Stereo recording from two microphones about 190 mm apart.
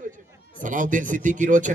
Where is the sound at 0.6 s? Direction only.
45° right (ahead or behind).